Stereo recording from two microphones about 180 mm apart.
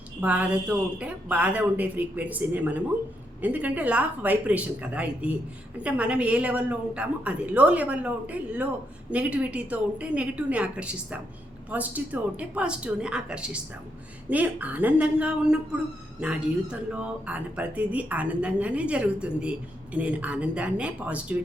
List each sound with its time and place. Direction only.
0.2 s speech: 10° right (ahead or behind)